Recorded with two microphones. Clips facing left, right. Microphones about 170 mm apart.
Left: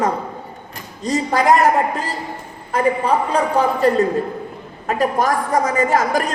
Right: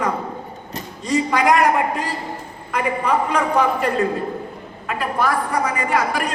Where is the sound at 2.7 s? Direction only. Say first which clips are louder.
Left 3 dB; 30° left (ahead or behind).